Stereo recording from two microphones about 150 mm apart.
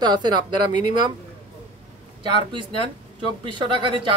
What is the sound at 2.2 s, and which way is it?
Speech, 35° right (ahead or behind).